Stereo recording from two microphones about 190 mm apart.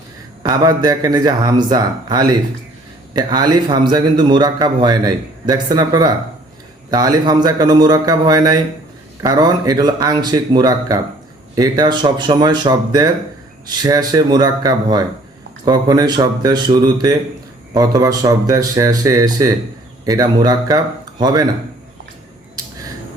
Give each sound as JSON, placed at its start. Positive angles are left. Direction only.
{"t": 0.4, "sound": "a man's voice", "side_deg": -20}